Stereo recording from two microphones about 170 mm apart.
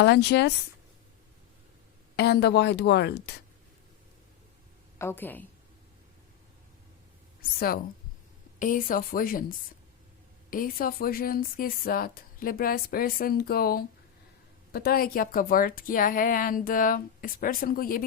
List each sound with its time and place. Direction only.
0.0 s speech: 75° left (ahead or behind)
2.1 s a woman's voice: 70° left (ahead or behind)
4.9 s a woman's voice: 15° left (ahead or behind)
8.5 s speech: 50° left (ahead or behind)